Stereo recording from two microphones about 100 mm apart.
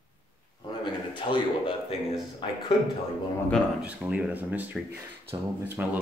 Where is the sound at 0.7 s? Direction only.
50° left (ahead or behind).